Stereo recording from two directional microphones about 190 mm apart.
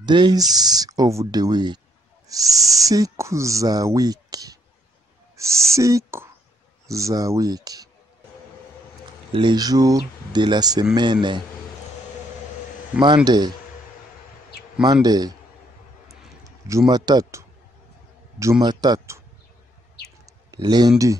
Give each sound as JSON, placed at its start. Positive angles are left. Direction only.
{"t": 0.0, "sound": "speech", "side_deg": -25}
{"t": 2.4, "sound": "owl", "side_deg": 0}
{"t": 2.8, "sound": "speech", "side_deg": -20}
{"t": 9.3, "sound": "speech", "side_deg": -25}
{"t": 13.0, "sound": "speech", "side_deg": -25}
{"t": 14.8, "sound": "speech", "side_deg": -20}
{"t": 16.4, "sound": "speech", "side_deg": -15}
{"t": 20.5, "sound": "speech", "side_deg": -20}